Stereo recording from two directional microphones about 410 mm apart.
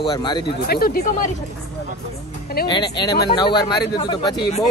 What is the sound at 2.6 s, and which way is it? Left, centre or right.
Speech, centre.